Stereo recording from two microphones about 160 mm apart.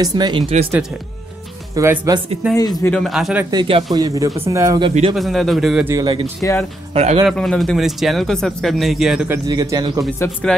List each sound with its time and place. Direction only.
0.0 s speech: 25° right (ahead or behind)
1.8 s speech: 20° right (ahead or behind)
2.5 s speech: 25° left (ahead or behind)
2.9 s speech: centre (ahead or behind)
3.4 s speech: 30° right (ahead or behind)
5.1 s speech: centre (ahead or behind)
5.9 s speech: 25° right (ahead or behind)
6.9 s speech: 40° right (ahead or behind)
7.2 s speech: centre (ahead or behind)
9.3 s speech: 25° right (ahead or behind)